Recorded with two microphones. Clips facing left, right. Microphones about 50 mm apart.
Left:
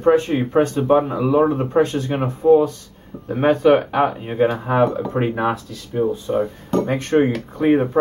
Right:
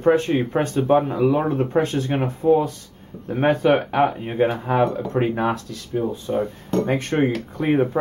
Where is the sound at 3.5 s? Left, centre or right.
Centre.